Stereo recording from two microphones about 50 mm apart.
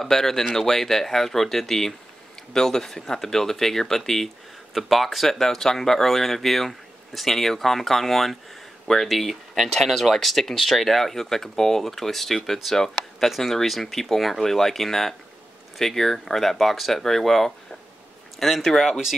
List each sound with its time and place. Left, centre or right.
0.0 s speech: centre